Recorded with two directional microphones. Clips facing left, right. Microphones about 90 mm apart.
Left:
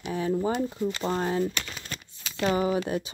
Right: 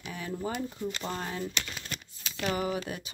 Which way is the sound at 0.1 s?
30° left (ahead or behind).